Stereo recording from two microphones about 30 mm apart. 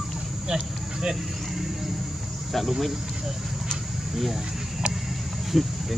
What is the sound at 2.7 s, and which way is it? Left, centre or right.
Speech, centre.